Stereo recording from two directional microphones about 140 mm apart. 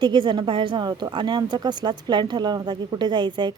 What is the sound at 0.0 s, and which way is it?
A woman's voice, 30° right (ahead or behind).